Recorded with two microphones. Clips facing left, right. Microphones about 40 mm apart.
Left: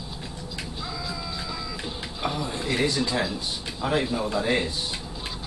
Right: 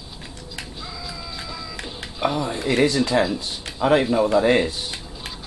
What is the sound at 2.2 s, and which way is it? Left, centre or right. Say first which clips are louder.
Speech: right 6 dB; centre.